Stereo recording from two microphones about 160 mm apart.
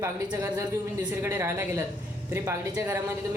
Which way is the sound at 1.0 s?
15° right (ahead or behind).